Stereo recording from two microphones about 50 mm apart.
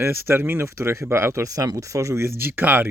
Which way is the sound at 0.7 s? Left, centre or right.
Right.